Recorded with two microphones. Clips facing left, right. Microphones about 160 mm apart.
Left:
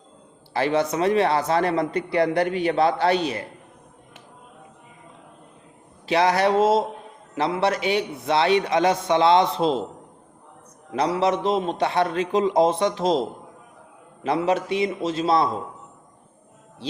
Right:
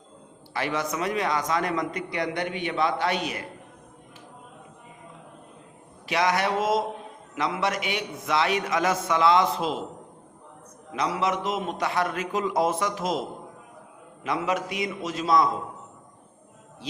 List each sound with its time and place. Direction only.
0.5 s a man's voice: 30° left (ahead or behind)
6.1 s a man's voice: 30° left (ahead or behind)
10.9 s a man's voice: 30° left (ahead or behind)
14.3 s a man's voice: 30° left (ahead or behind)